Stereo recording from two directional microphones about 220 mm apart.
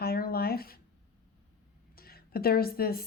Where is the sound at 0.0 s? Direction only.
45° left (ahead or behind).